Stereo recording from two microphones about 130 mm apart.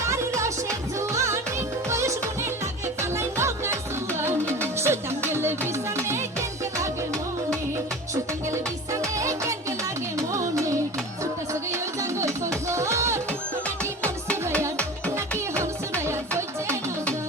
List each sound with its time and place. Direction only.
0.3 s music: 25° right (ahead or behind)
8.1 s music: 25° right (ahead or behind)
15.6 s music: 20° right (ahead or behind)